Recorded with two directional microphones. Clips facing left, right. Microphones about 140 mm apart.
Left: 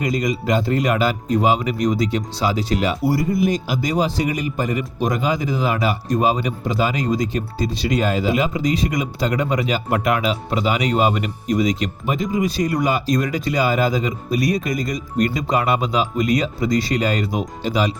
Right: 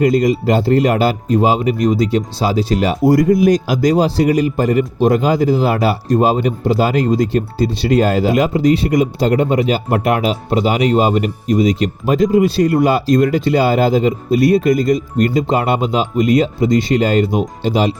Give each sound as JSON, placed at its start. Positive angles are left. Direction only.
{"t": 0.0, "sound": "speech", "side_deg": -30}